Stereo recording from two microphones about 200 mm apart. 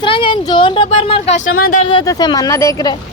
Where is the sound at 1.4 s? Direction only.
90° left.